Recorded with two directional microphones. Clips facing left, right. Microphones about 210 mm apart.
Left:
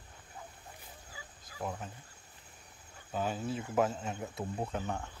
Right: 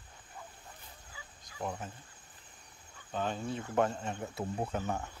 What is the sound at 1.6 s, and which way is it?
Speech, centre (ahead or behind).